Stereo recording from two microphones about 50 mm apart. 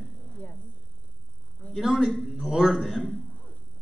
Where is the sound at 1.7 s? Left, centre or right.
Centre.